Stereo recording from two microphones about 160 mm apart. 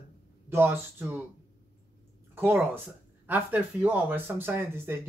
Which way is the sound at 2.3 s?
15° right (ahead or behind).